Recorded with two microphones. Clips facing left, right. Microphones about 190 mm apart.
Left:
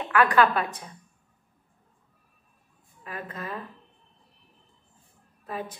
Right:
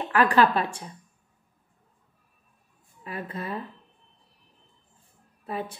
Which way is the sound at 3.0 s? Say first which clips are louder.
Right 3 dB; 30° right (ahead or behind).